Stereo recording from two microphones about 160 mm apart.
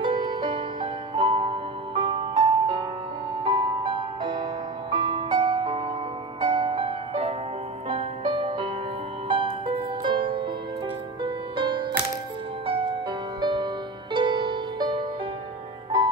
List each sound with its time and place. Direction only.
0.0 s music: 30° right (ahead or behind)
11.2 s music: 30° right (ahead or behind)
13.4 s music: 30° right (ahead or behind)